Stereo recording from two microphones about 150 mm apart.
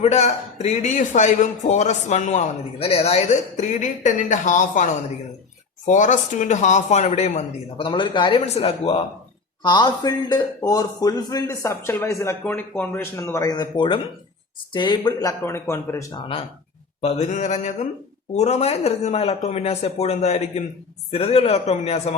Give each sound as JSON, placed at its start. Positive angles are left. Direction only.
{"t": 0.0, "sound": "a man's voice", "side_deg": 45}
{"t": 8.4, "sound": "a man's voice", "side_deg": 45}
{"t": 9.6, "sound": "a man's voice", "side_deg": 30}
{"t": 16.1, "sound": "speech", "side_deg": 40}
{"t": 17.0, "sound": "a man's voice", "side_deg": 50}